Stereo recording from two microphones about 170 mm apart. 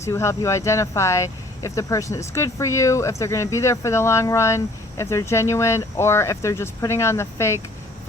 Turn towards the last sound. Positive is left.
turn(degrees=15)  # may be behind; listen again after turning